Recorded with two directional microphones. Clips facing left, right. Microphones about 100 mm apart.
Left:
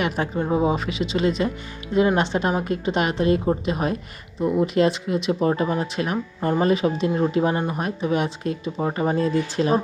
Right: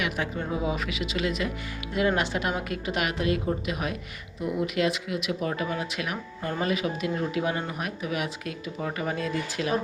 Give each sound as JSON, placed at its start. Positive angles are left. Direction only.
{"t": 0.0, "sound": "speech", "side_deg": 35}